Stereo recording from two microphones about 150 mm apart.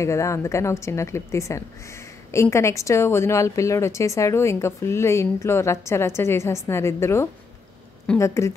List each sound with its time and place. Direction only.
0.0 s a woman's voice: 20° left (ahead or behind)